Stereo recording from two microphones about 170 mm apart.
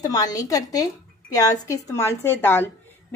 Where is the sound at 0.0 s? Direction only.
20° left (ahead or behind).